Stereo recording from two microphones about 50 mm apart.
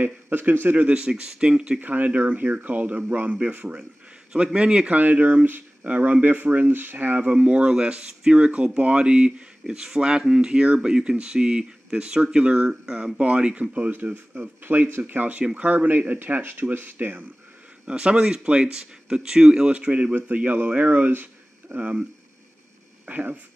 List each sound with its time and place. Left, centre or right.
0.0 s speech: right
0.8 s speech: right
1.8 s speech: right
4.9 s speech: right; by 13.1 s centre
13.2 s speech: right
14.6 s speech: right
16.3 s speech: right
16.7 s speech: right
17.8 s speech: centre
19.7 s speech: right
21.1 s a sound: right
23.0 s speech: right